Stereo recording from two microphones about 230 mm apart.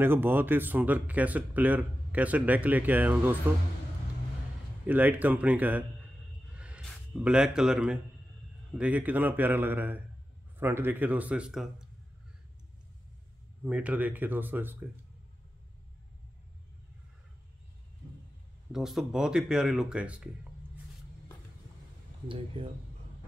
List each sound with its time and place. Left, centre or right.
0.0 s speech: centre
4.8 s speech: centre
13.7 s speech: centre
18.7 s speech: centre
22.6 s speech: right